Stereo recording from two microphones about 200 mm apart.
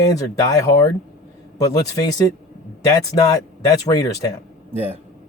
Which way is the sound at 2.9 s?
20° left (ahead or behind).